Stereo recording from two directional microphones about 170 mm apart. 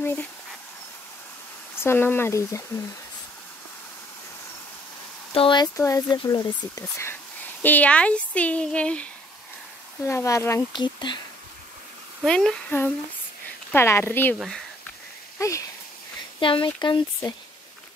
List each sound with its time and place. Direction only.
0.0 s dog: 10° left (ahead or behind)
1.8 s speech: 15° left (ahead or behind)
5.3 s speech: 30° left (ahead or behind); by 9.0 s 5° left (ahead or behind)
10.0 s speech: 15° left (ahead or behind)
12.3 s speech: 5° left (ahead or behind)
13.7 s speech: 15° left (ahead or behind)
15.3 s speech: 15° left (ahead or behind)
16.3 s speech: 30° left (ahead or behind)